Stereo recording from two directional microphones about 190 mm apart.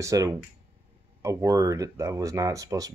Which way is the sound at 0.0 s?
15° right (ahead or behind).